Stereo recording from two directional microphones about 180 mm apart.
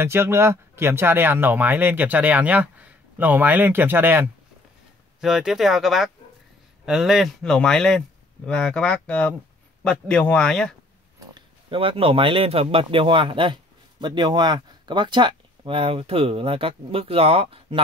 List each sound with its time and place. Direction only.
0.0 s speech: 15° right (ahead or behind); by 10.7 s 5° left (ahead or behind)
11.3 s speech: 30° right (ahead or behind)